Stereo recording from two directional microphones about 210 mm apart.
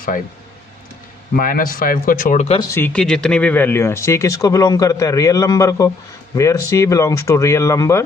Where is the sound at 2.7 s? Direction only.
10° left (ahead or behind).